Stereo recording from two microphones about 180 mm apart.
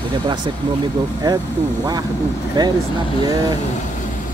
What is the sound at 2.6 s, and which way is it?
Speech, 25° right (ahead or behind).